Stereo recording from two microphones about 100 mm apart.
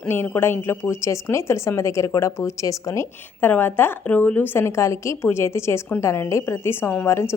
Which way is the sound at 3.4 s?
20° left (ahead or behind).